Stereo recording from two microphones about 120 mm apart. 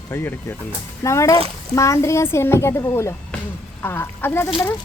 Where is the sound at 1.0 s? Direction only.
25° left (ahead or behind).